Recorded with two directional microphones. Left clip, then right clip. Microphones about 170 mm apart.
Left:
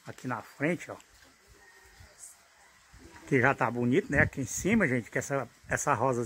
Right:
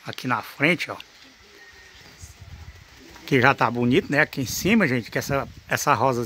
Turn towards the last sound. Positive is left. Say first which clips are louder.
# right 7 dB
turn(degrees=-20)  # may be behind; listen again after turning